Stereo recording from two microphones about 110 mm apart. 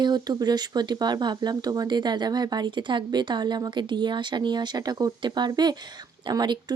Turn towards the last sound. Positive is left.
turn(degrees=-40)  # may be behind; listen again after turning